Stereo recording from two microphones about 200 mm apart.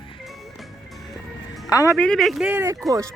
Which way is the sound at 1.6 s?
15° left (ahead or behind).